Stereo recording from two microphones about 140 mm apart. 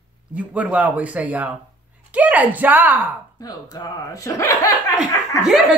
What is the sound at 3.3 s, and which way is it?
Speech, 30° left (ahead or behind).